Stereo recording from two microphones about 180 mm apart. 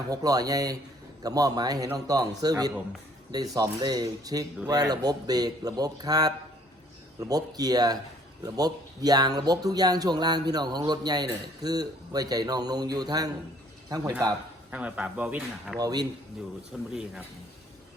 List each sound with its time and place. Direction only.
0.1 s speech: 20° right (ahead or behind)
14.7 s speech: 5° right (ahead or behind)
15.8 s speech: 20° right (ahead or behind)
16.9 s speech: 5° right (ahead or behind)